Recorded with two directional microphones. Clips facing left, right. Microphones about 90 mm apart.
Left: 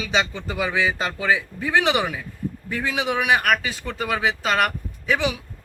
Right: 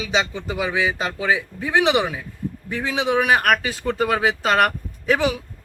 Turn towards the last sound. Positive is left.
turn(degrees=-40)  # may be behind; listen again after turning